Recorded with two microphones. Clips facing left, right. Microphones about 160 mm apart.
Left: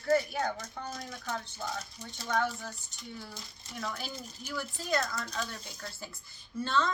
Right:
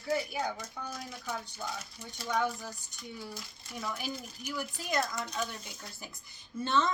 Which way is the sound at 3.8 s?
10° right (ahead or behind).